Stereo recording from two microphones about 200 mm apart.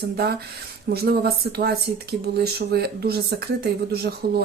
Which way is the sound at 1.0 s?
50° right (ahead or behind).